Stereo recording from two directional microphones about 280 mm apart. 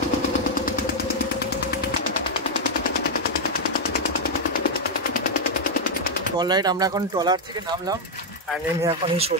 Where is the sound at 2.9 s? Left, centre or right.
Left.